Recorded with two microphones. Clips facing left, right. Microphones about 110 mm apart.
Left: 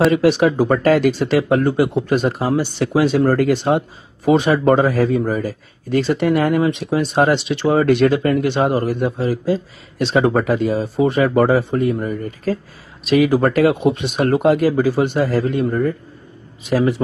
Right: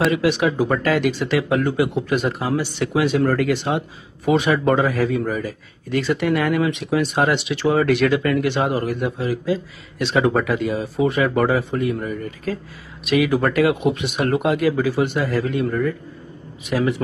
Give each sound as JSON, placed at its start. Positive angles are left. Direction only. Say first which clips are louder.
{"t": 0.1, "sound": "speech", "louder": "left 5 dB", "side_deg": 40}